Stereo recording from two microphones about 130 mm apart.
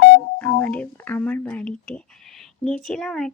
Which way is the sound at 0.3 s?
10° left (ahead or behind).